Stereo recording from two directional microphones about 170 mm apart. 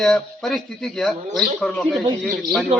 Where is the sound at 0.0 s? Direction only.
Centre (ahead or behind).